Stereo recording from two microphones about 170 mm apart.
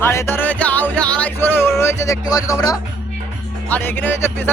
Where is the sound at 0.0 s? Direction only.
15° left (ahead or behind).